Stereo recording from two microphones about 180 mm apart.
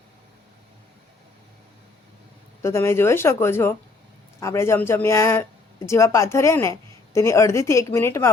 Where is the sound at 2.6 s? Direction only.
15° left (ahead or behind).